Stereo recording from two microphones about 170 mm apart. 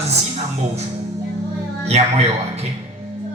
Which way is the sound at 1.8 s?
40° right (ahead or behind).